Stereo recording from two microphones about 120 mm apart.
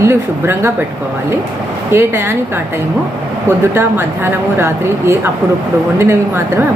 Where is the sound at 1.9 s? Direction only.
20° right (ahead or behind).